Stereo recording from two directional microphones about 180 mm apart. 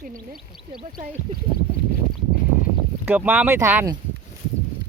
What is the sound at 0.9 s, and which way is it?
Speech, 45° right (ahead or behind).